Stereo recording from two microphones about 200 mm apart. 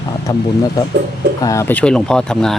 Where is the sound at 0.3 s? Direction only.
20° left (ahead or behind).